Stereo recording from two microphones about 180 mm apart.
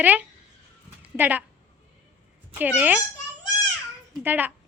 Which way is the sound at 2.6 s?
10° right (ahead or behind).